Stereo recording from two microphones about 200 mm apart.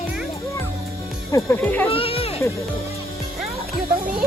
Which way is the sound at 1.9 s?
30° left (ahead or behind).